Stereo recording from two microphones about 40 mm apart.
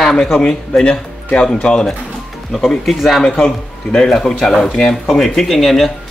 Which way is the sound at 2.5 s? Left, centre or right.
Centre.